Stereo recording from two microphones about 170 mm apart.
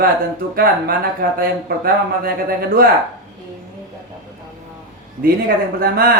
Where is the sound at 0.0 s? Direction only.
60° right (ahead or behind).